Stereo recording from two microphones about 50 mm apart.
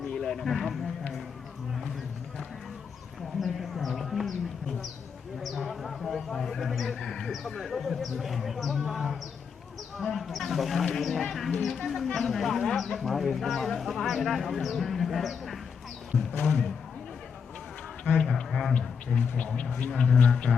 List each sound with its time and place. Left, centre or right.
0.2 s music: centre
3.4 s a sound: centre
5.4 s speech: centre
16.4 s speech: centre
18.0 s a sound: left
19.9 s speech: centre